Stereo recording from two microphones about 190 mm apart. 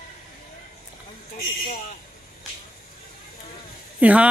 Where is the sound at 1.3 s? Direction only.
50° left (ahead or behind).